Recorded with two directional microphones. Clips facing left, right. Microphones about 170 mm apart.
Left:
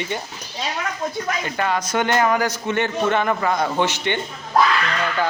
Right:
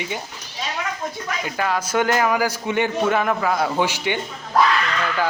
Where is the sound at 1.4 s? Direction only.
Centre (ahead or behind).